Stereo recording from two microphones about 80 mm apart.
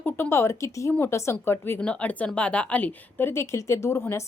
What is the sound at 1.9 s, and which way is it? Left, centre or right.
A woman's voice, centre.